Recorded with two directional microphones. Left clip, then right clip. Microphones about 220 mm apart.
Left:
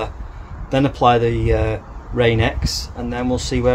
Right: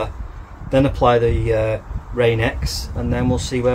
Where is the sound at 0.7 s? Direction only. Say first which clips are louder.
Even; 20° left (ahead or behind).